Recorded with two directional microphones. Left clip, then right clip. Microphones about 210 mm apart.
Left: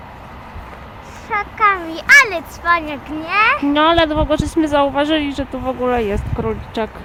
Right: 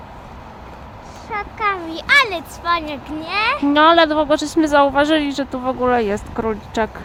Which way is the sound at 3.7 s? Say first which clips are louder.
Right 2 dB; 5° right (ahead or behind).